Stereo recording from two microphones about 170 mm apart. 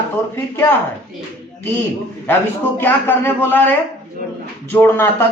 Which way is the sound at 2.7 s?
10° left (ahead or behind).